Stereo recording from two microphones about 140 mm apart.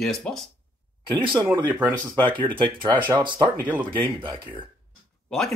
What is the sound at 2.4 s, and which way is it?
Speech, 35° right (ahead or behind).